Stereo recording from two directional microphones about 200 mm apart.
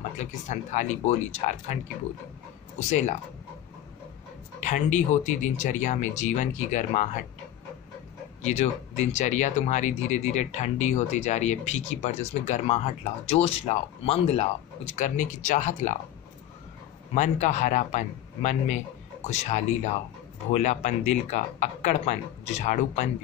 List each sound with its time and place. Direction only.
0.2 s speech: 35° left (ahead or behind)
2.9 s speech: 35° left (ahead or behind)
4.6 s speech: 35° left (ahead or behind)
8.4 s speech: 35° left (ahead or behind)
17.1 s speech: 35° left (ahead or behind)